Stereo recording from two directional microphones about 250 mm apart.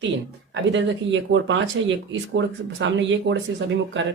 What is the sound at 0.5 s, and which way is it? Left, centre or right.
Speech, right.